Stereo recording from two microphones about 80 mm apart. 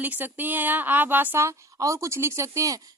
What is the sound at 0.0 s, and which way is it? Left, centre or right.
Speech, right.